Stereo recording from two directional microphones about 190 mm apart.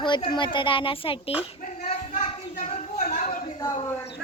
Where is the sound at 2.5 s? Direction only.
45° left (ahead or behind).